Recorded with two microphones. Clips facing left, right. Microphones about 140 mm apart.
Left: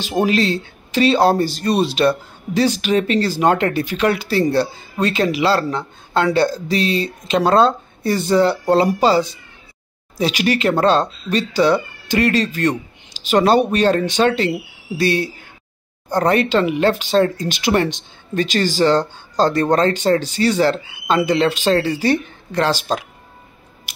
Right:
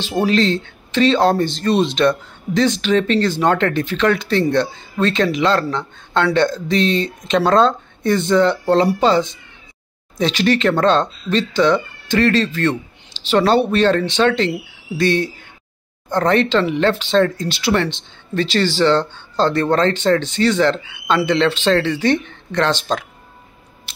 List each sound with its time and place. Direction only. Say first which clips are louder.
0.0 s speech: right 1 dB; 15° left (ahead or behind)
20.8 s speech: even; 35° left (ahead or behind)
21.3 s speech: right 1 dB; 10° left (ahead or behind)